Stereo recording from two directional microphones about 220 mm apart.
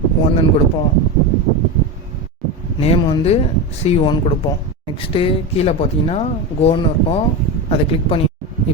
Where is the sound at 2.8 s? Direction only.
30° left (ahead or behind).